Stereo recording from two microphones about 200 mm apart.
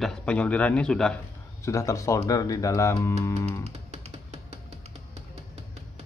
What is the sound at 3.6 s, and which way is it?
Music, 30° right (ahead or behind).